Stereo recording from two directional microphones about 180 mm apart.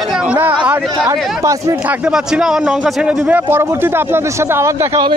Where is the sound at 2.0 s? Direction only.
5° right (ahead or behind).